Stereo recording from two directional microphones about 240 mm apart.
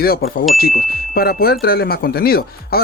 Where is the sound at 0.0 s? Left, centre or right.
Left.